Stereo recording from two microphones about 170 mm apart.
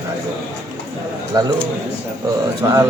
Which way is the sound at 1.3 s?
25° right (ahead or behind).